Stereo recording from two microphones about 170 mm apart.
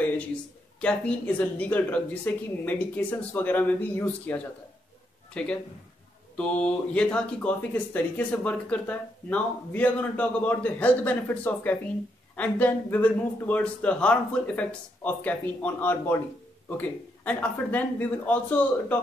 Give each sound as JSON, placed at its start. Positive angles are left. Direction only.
{"t": 0.7, "sound": "speech", "side_deg": 5}